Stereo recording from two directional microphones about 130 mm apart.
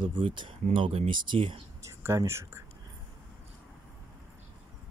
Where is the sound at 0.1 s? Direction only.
40° right (ahead or behind).